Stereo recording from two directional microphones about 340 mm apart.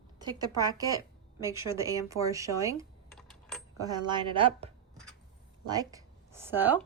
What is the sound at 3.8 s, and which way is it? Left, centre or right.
A woman's voice, centre.